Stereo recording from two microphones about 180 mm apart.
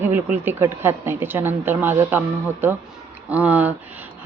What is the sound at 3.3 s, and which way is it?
Speech, 10° right (ahead or behind).